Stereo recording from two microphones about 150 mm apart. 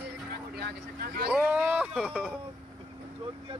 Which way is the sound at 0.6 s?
90° right.